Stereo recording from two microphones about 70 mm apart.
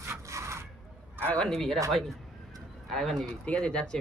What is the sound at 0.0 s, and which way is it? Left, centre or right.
Wood, right.